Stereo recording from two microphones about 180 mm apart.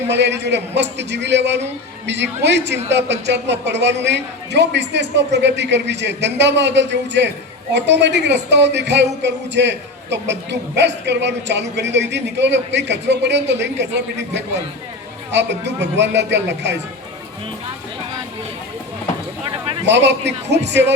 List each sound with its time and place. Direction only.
0.1 s a man's voice: 70° right (ahead or behind)
19.9 s a man's voice: 75° right (ahead or behind)